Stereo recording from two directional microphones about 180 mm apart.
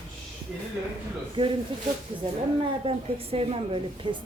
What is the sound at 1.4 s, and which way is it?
Speech, 30° right (ahead or behind).